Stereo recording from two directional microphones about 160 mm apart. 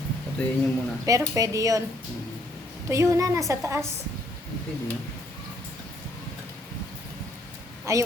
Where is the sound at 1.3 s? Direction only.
20° right (ahead or behind).